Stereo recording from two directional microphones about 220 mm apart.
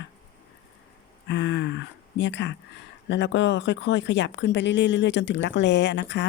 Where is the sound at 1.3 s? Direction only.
55° left (ahead or behind).